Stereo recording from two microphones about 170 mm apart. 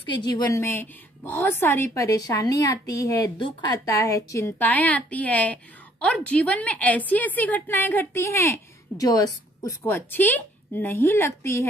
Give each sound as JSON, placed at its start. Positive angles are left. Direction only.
{"t": 0.2, "sound": "a woman's voice", "side_deg": 25}